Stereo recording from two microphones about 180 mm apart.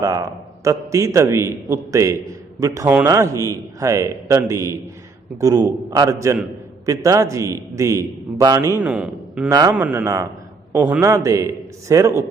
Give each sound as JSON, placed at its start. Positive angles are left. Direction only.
{"t": 0.0, "sound": "a man's voice", "side_deg": -15}
{"t": 9.5, "sound": "a man's voice", "side_deg": -20}
{"t": 9.7, "sound": "a man's voice", "side_deg": -10}